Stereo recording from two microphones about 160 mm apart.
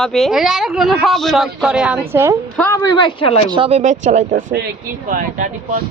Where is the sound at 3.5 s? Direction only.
35° right (ahead or behind).